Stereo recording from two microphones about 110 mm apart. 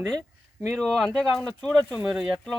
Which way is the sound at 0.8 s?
5° left (ahead or behind).